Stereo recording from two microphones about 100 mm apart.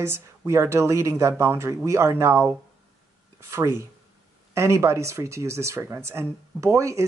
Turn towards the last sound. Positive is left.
turn(degrees=-30)  # may be behind; listen again after turning